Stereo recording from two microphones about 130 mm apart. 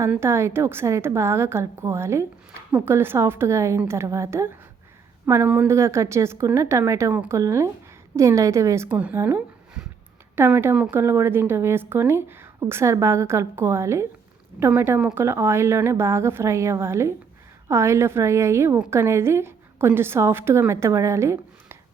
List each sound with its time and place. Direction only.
0.0 s a woman's voice: 20° right (ahead or behind)